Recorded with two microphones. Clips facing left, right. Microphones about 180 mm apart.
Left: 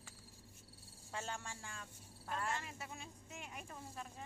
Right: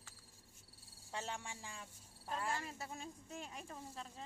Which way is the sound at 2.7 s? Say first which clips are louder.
Right 3 dB; 35° right (ahead or behind).